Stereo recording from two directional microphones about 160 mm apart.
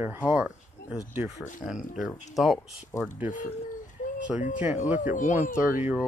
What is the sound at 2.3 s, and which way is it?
Speech, centre (ahead or behind).